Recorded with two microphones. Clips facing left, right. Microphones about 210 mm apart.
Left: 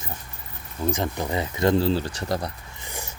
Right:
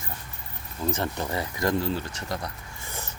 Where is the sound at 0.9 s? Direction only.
15° left (ahead or behind); by 2.5 s 30° left (ahead or behind).